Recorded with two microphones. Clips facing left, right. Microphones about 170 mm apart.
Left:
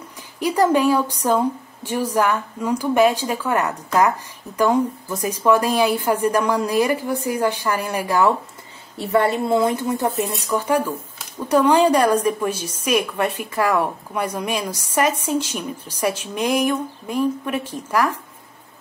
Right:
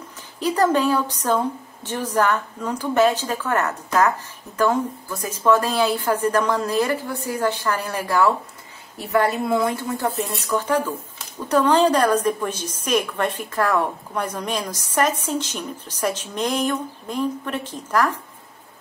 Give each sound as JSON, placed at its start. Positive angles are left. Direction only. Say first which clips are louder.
{"t": 0.4, "sound": "a woman's voice", "louder": "left 2 dB", "side_deg": 10}
{"t": 8.9, "sound": "a woman's voice", "louder": "left 2 dB", "side_deg": 30}